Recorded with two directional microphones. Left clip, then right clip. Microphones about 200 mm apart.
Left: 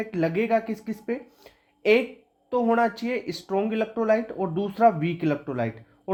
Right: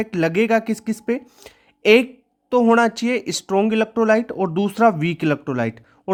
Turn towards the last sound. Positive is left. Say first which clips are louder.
# right 5 dB
turn(degrees=-35)  # may be behind; listen again after turning